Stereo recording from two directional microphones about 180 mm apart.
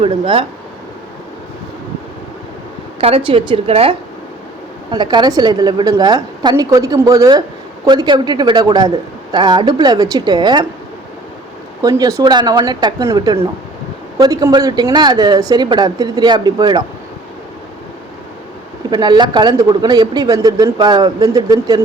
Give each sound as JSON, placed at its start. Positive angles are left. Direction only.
{"t": 0.0, "sound": "a woman's voice", "side_deg": -30}
{"t": 3.0, "sound": "a woman's voice", "side_deg": -30}
{"t": 11.8, "sound": "speech", "side_deg": -20}
{"t": 18.9, "sound": "speech", "side_deg": -25}